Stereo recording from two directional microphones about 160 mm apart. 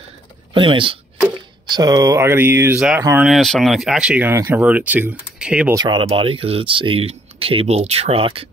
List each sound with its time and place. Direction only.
0.6 s speech: 30° right (ahead or behind); by 3.3 s 15° right (ahead or behind)
3.3 s speech: centre (ahead or behind)
5.8 s speech: 30° right (ahead or behind)